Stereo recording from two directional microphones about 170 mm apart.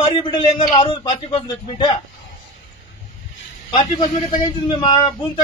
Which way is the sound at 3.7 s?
30° left (ahead or behind).